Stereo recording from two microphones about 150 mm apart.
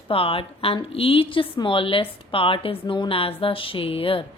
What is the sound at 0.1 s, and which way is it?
A woman's voice, 40° left (ahead or behind).